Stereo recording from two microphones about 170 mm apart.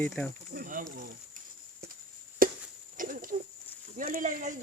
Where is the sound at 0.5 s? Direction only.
55° right (ahead or behind).